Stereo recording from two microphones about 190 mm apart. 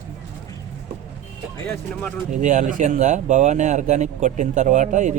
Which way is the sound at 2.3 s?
40° right (ahead or behind).